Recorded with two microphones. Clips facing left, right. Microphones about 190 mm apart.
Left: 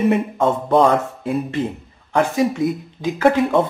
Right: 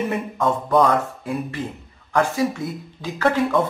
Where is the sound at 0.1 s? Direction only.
25° left (ahead or behind).